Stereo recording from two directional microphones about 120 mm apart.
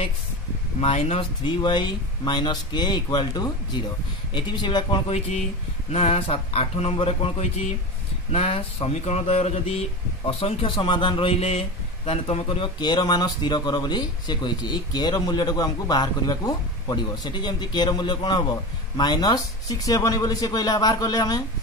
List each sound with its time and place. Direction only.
0.7 s speech: 55° left (ahead or behind)
1.4 s speech: 40° left (ahead or behind)
5.9 s speech: 55° left (ahead or behind)
8.3 s speech: 50° left (ahead or behind); by 21.4 s 35° left (ahead or behind)